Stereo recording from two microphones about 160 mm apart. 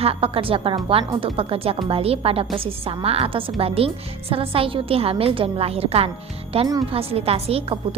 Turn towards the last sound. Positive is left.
turn(degrees=-35)  # may be behind; listen again after turning